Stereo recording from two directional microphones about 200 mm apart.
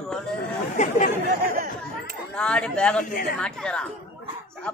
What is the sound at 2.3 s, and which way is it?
Speech, 5° left (ahead or behind).